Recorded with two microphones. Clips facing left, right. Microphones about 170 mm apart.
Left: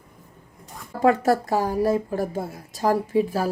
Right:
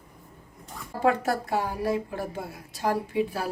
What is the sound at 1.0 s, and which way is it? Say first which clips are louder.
Speech: left 5 dB; 40° left (ahead or behind).